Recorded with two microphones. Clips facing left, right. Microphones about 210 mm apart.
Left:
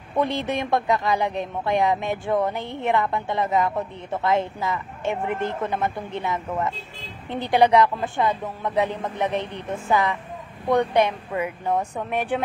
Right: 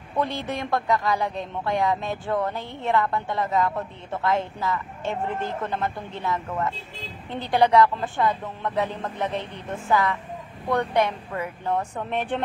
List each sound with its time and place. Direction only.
0.2 s speech: 20° left (ahead or behind)